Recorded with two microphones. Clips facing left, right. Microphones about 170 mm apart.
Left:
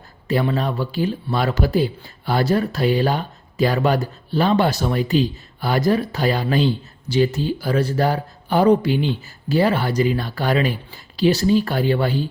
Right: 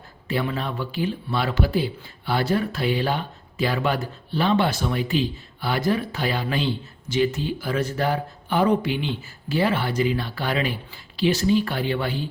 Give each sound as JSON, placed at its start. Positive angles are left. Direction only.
{"t": 0.3, "sound": "speech", "side_deg": 40}